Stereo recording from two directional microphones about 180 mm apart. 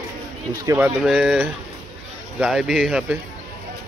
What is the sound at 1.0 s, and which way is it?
Speech, 5° right (ahead or behind).